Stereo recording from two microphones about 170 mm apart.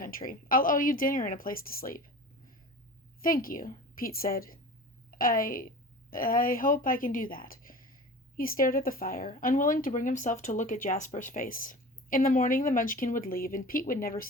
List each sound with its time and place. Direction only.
0.0 s a woman's voice: 55° left (ahead or behind)
3.2 s a woman's voice: 55° left (ahead or behind)